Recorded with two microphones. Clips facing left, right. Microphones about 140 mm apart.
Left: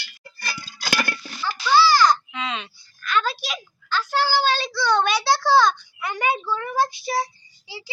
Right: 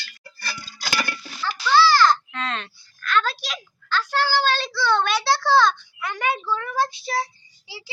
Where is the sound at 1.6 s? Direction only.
5° left (ahead or behind).